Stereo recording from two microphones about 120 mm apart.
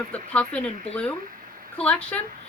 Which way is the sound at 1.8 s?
10° left (ahead or behind).